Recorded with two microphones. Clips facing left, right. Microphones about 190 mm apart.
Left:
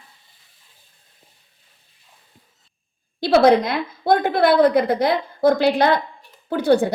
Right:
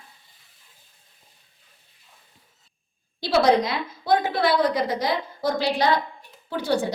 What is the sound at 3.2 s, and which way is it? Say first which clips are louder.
A woman's voice: left 5 dB; 55° left (ahead or behind).